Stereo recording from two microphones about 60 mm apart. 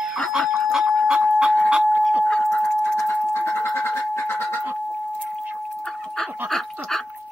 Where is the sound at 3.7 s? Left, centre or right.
Left.